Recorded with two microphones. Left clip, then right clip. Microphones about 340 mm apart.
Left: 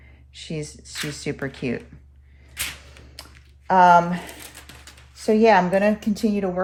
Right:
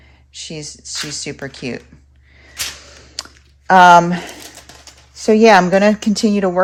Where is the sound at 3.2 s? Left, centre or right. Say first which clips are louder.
Right 14 dB; right.